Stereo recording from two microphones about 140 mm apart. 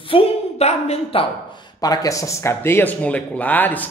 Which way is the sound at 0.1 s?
50° left (ahead or behind).